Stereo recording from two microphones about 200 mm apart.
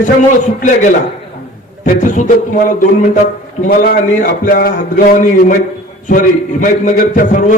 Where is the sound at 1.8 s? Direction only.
40° left (ahead or behind).